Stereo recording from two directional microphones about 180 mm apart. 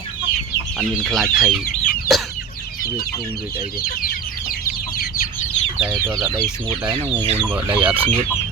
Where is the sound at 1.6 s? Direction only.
50° left (ahead or behind).